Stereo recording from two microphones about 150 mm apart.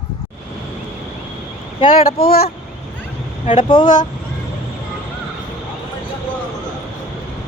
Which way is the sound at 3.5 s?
35° left (ahead or behind).